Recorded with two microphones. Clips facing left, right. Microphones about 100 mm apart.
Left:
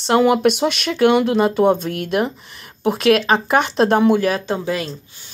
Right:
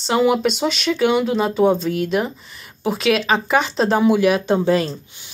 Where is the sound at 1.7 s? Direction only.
55° left (ahead or behind).